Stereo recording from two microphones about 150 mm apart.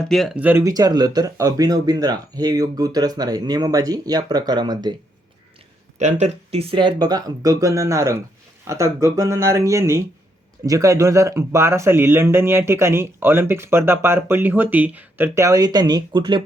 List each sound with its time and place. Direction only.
0.1 s speech: centre (ahead or behind)
0.3 s speech: 10° right (ahead or behind)
0.6 s speech: 25° right (ahead or behind)
6.0 s speech: 50° right (ahead or behind); by 16.4 s 30° right (ahead or behind)